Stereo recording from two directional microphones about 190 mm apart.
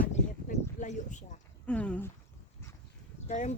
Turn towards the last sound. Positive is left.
turn(degrees=35)  # may be behind; listen again after turning